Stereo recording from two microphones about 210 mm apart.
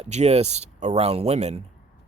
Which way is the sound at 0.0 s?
30° right (ahead or behind).